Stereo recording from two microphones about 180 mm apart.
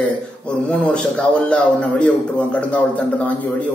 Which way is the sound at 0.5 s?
5° left (ahead or behind).